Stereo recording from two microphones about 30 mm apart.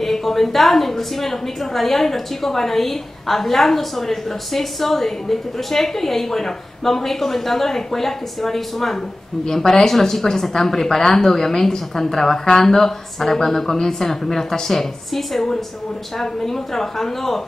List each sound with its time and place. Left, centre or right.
0.0 s a woman's voice: centre